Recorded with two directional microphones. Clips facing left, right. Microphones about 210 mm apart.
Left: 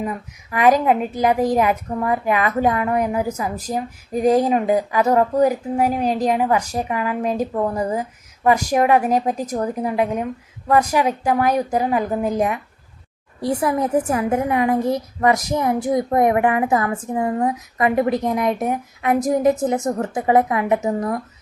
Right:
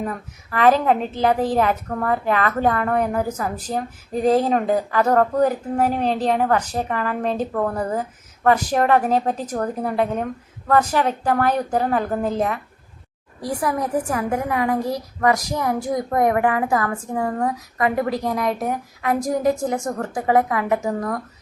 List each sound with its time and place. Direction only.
0.0 s speech: 10° left (ahead or behind)
13.4 s a woman's voice: 25° left (ahead or behind)